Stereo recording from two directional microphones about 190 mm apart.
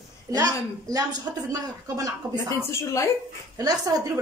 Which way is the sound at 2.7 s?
15° left (ahead or behind).